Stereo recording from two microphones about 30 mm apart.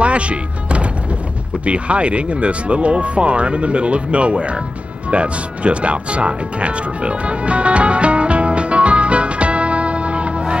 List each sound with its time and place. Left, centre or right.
0.0 s music: right
1.7 s speech: right
5.1 s music: right